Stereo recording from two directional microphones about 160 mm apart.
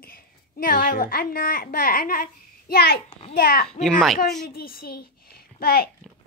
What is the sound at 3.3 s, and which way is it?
Speech, 70° left (ahead or behind).